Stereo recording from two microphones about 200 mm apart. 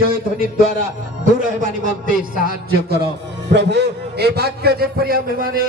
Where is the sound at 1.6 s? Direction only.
45° right (ahead or behind).